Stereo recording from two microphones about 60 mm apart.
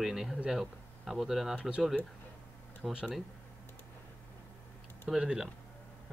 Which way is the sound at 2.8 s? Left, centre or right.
Centre.